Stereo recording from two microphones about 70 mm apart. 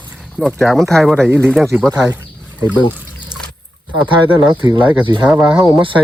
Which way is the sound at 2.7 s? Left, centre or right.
Centre.